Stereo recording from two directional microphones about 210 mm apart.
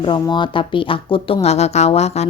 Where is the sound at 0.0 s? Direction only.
20° left (ahead or behind).